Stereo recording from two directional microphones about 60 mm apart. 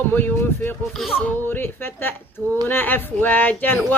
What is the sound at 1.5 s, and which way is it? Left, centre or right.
Speech, left.